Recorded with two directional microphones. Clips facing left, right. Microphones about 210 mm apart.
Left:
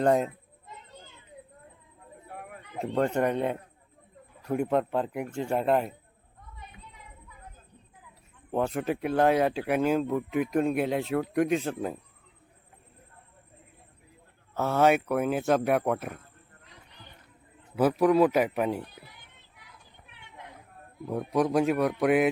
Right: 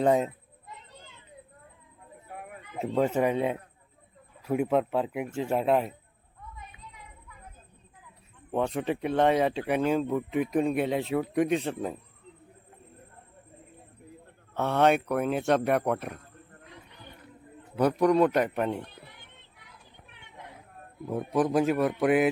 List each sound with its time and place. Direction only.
0.0 s speech: centre (ahead or behind)
2.3 s speech: centre (ahead or behind)
8.5 s speech: centre (ahead or behind)
14.5 s speech: centre (ahead or behind)
17.7 s speech: 5° left (ahead or behind)
21.1 s speech: centre (ahead or behind)